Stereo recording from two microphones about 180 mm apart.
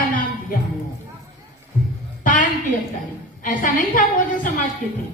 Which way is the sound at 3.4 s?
45° left (ahead or behind).